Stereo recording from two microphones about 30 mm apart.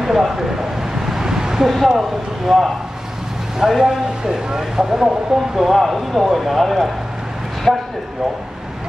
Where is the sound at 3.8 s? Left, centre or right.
Right.